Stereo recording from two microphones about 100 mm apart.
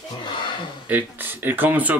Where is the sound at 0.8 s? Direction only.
20° right (ahead or behind).